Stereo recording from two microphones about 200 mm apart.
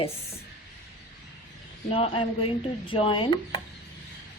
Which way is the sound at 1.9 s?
30° left (ahead or behind).